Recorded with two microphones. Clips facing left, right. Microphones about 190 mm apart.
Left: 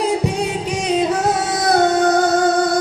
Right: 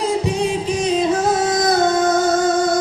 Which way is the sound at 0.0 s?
65° left (ahead or behind).